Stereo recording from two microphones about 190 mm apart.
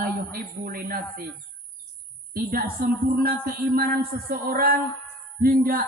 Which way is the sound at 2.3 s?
50° right (ahead or behind).